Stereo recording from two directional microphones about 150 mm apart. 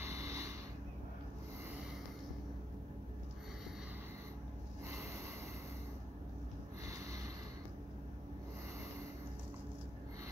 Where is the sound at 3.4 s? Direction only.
5° right (ahead or behind).